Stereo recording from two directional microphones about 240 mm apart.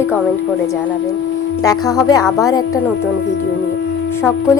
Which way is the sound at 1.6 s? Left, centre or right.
Centre.